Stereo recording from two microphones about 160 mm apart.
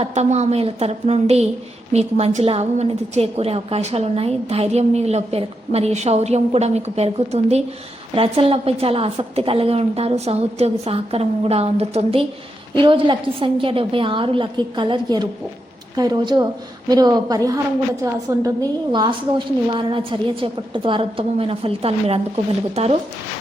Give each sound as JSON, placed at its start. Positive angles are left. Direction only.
{"t": 0.0, "sound": "a woman's voice", "side_deg": -45}